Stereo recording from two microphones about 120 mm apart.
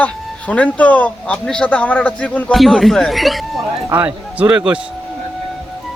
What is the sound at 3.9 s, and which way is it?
Speech, 15° right (ahead or behind).